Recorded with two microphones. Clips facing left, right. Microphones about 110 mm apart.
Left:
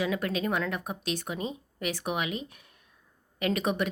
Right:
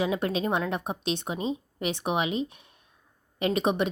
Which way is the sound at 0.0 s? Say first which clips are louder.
Right 2 dB; 25° right (ahead or behind).